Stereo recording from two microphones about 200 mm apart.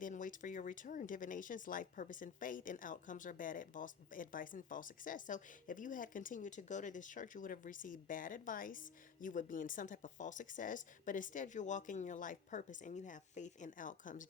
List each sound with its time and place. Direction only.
0.0 s speech: 40° left (ahead or behind)